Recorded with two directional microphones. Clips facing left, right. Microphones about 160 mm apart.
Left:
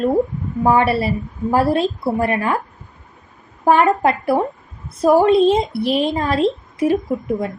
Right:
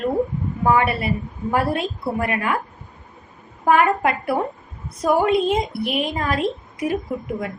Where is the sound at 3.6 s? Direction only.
30° left (ahead or behind).